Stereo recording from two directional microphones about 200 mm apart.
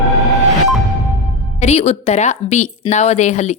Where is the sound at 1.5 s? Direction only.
35° left (ahead or behind).